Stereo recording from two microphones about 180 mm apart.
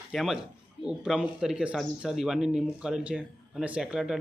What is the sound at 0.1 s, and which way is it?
A man's voice, centre (ahead or behind).